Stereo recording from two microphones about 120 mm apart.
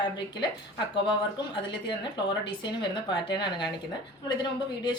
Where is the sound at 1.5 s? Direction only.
40° left (ahead or behind).